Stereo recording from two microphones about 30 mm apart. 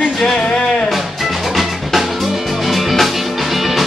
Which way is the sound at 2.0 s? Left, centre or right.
Centre.